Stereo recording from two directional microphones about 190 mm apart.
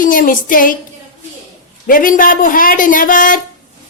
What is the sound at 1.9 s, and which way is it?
Speech, 45° left (ahead or behind).